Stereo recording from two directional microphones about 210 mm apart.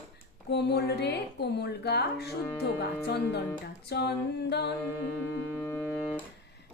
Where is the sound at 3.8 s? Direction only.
50° left (ahead or behind).